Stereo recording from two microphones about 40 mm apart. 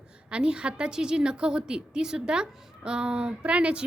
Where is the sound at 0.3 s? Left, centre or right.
Right.